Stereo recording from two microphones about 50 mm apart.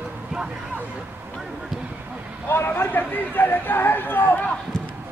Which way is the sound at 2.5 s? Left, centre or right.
Left.